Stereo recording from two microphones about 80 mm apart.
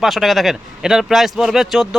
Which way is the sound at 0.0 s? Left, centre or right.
Centre.